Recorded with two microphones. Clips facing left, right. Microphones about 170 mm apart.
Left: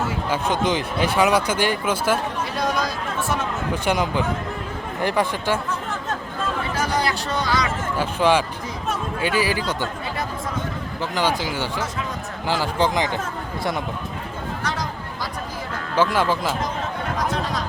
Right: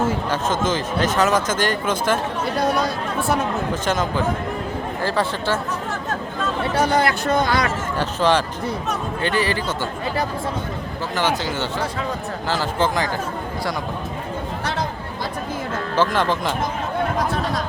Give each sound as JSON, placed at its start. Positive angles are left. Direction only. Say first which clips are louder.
{"t": 0.1, "sound": "speech", "louder": "right 1 dB", "side_deg": 10}
{"t": 3.8, "sound": "speech", "louder": "left 1 dB", "side_deg": 15}
{"t": 6.9, "sound": "speech", "louder": "right 5 dB", "side_deg": -50}
{"t": 7.9, "sound": "speech", "louder": "even", "side_deg": 10}
{"t": 11.1, "sound": "speech", "louder": "right 1 dB", "side_deg": 10}
{"t": 16.1, "sound": "speech", "louder": "even", "side_deg": 10}